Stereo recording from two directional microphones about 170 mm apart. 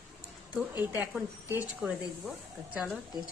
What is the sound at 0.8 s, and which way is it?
A woman's voice, 10° right (ahead or behind).